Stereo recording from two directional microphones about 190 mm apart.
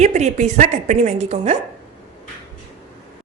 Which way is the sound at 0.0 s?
35° right (ahead or behind).